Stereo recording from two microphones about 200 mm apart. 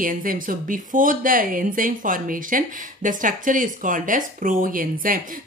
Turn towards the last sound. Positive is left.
turn(degrees=-45)  # may be behind; listen again after turning